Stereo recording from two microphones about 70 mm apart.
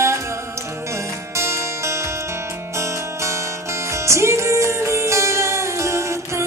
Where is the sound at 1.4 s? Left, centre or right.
Right.